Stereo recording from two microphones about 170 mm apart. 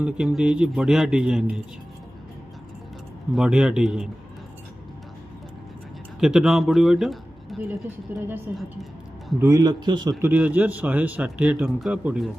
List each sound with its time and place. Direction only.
0.0 s a man's voice: 5° right (ahead or behind)
3.3 s a man's voice: 5° right (ahead or behind)
6.1 s speech: 5° right (ahead or behind)
8.1 s a man's voice: 10° right (ahead or behind)
9.4 s a man's voice: 20° right (ahead or behind)
10.2 s a man's voice: 5° right (ahead or behind)